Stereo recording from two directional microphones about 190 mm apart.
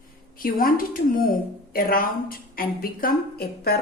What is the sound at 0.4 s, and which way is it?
A woman's voice, 50° left (ahead or behind).